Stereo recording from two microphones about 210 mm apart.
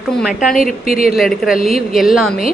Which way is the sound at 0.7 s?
40° left (ahead or behind).